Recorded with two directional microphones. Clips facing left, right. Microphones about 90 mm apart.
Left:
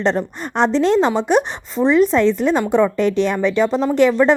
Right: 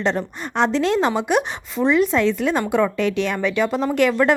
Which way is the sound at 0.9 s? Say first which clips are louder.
Left 3 dB; 5° right (ahead or behind).